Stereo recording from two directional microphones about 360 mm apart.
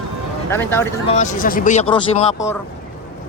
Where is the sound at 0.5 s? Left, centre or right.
Centre.